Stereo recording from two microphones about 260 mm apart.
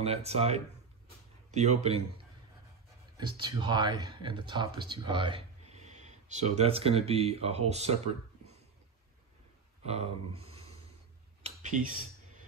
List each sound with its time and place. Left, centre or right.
0.0 s speech: right
9.8 s speech: right